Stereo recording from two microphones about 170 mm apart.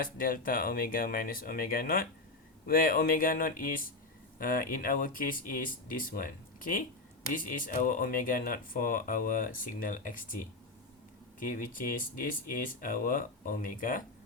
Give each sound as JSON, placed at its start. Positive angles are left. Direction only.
{"t": 0.0, "sound": "speech", "side_deg": 55}
{"t": 11.3, "sound": "speech", "side_deg": 55}